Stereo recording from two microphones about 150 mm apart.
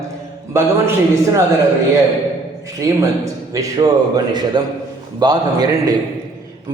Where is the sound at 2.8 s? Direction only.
20° right (ahead or behind).